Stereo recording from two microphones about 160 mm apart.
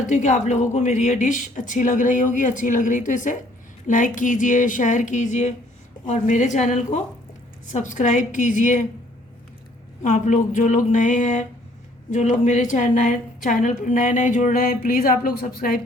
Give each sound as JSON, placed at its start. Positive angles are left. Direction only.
{"t": 0.1, "sound": "speech", "side_deg": 50}
{"t": 10.0, "sound": "a woman's voice", "side_deg": 50}